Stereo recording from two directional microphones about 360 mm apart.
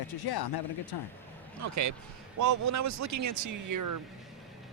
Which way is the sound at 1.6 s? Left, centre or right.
Right.